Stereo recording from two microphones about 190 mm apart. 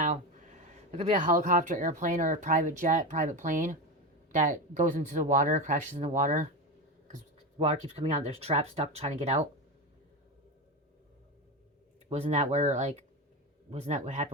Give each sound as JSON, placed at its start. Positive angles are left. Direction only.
{"t": 0.0, "sound": "speech", "side_deg": -40}
{"t": 7.6, "sound": "speech", "side_deg": -35}
{"t": 12.0, "sound": "speech", "side_deg": -35}